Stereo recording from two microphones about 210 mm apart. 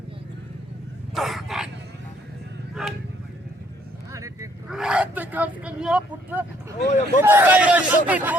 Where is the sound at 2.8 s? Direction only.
Centre (ahead or behind).